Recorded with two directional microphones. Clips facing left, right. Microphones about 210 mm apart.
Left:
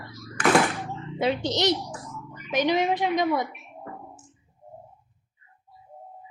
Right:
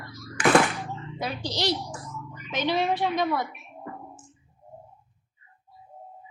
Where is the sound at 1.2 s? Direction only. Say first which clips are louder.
Left 6 dB; 25° left (ahead or behind).